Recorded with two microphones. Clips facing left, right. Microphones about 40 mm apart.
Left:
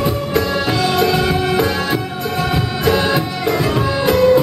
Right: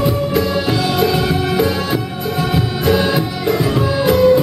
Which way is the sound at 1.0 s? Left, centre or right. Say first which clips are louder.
Even; centre.